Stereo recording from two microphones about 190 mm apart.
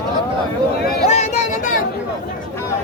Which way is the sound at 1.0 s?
35° left (ahead or behind).